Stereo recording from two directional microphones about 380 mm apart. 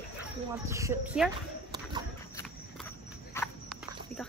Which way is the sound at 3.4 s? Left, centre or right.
Centre.